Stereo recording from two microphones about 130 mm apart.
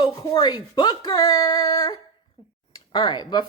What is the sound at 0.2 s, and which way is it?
A woman's voice, 30° left (ahead or behind).